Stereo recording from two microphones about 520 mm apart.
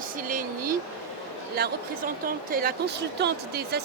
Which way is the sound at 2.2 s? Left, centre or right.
Centre.